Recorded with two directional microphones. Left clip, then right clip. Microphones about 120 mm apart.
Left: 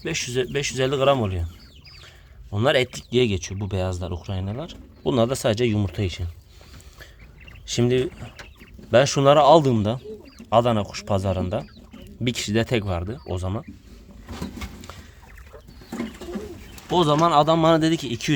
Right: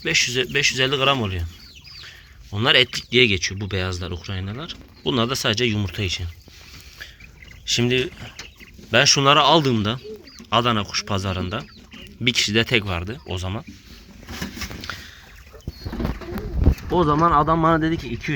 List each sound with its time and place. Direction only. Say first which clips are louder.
0.0 s speech: right 6 dB; 20° left (ahead or behind)
2.0 s a sound: right 4 dB; 25° left (ahead or behind)
3.1 s speech: right 5 dB; 20° left (ahead or behind)
7.6 s a man's voice: right 1 dB; 35° left (ahead or behind)
13.2 s a man's voice: even; 40° left (ahead or behind)
16.9 s speech: even; 25° left (ahead or behind)